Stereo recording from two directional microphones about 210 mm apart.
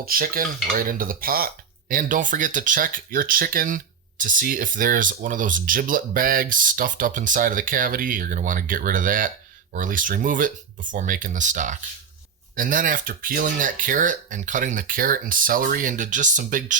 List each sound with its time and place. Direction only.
0.0 s cutlery: 45° right (ahead or behind)
1.9 s speech: 40° right (ahead or behind)